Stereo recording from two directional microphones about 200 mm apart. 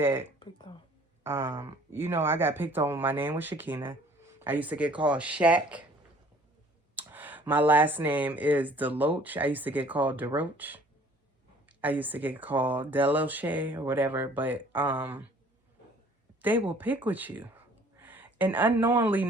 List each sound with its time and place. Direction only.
0.0 s speech: 10° right (ahead or behind)
0.3 s speech: 25° left (ahead or behind)
1.2 s speech: 10° right (ahead or behind)
6.9 s speech: 10° right (ahead or behind)
16.4 s speech: 10° right (ahead or behind)